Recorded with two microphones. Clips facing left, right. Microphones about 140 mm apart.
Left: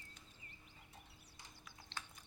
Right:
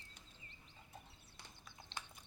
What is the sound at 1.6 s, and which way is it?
Clip-clop, 20° right (ahead or behind).